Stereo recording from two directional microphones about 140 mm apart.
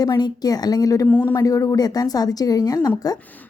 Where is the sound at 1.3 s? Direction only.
25° left (ahead or behind).